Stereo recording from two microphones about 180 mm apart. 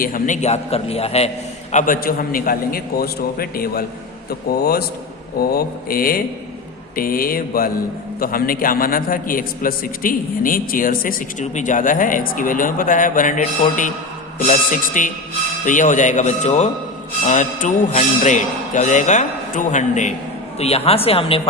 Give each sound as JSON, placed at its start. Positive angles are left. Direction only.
{"t": 0.0, "sound": "speech", "side_deg": 50}
{"t": 1.7, "sound": "a man's voice", "side_deg": 50}